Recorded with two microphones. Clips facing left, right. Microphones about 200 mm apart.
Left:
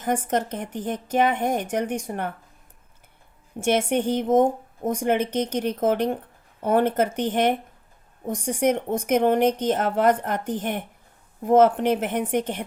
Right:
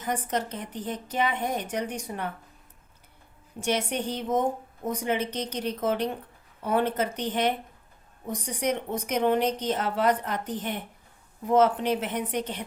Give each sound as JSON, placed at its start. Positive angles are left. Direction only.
{"t": 0.0, "sound": "a woman's voice", "side_deg": 50}
{"t": 4.1, "sound": "a woman's voice", "side_deg": 50}